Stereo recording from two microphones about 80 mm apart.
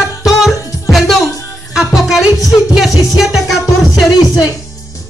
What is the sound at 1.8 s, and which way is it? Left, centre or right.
Music, centre.